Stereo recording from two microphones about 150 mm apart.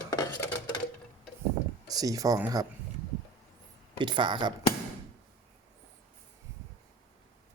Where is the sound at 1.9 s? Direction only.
25° right (ahead or behind).